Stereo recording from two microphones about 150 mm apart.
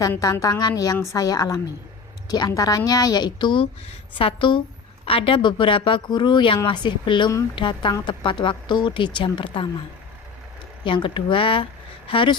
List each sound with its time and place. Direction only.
0.2 s a woman's voice: 25° left (ahead or behind)
10.8 s speech: 35° left (ahead or behind)